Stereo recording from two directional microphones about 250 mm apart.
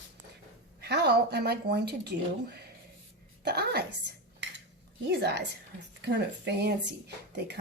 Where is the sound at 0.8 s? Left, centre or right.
Right.